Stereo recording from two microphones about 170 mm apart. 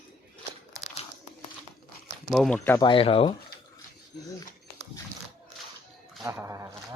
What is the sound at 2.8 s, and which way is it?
Speech, 30° left (ahead or behind).